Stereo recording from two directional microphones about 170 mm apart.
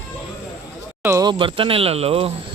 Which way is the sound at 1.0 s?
15° right (ahead or behind).